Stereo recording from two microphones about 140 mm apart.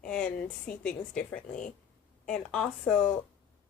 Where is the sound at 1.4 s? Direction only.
70° left (ahead or behind).